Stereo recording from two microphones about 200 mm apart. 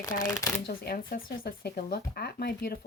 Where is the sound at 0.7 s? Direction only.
45° left (ahead or behind).